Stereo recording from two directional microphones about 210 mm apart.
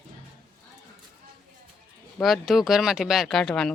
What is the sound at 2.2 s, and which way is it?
Speech, centre (ahead or behind).